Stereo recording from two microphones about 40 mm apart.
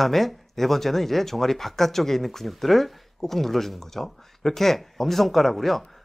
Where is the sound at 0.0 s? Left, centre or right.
Centre.